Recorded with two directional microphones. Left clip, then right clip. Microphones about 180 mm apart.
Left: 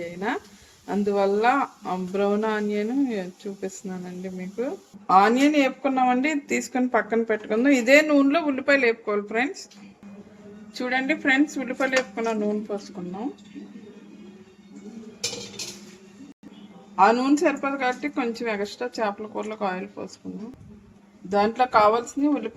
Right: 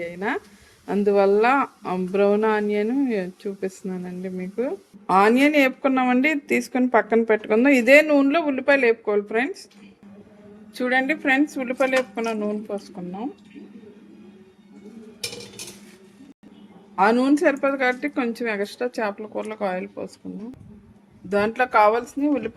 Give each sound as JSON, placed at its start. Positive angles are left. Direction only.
{"t": 0.0, "sound": "speech", "side_deg": -35}
{"t": 10.8, "sound": "a woman's voice", "side_deg": -25}
{"t": 16.9, "sound": "a woman's voice", "side_deg": -25}
{"t": 21.2, "sound": "a woman's voice", "side_deg": -25}